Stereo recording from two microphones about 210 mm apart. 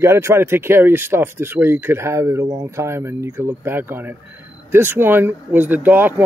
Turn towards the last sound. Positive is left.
turn(degrees=-10)  # may be behind; listen again after turning